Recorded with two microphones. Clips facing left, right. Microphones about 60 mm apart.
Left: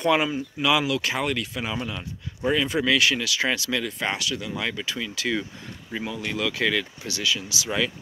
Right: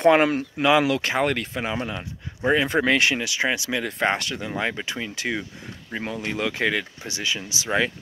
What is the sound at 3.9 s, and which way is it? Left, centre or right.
Speech, right.